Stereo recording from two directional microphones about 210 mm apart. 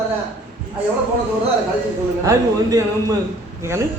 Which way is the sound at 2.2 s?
15° right (ahead or behind).